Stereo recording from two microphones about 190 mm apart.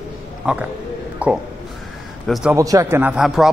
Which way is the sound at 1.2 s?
5° right (ahead or behind).